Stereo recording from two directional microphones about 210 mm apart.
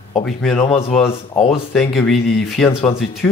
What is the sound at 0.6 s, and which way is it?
Speech, 30° left (ahead or behind).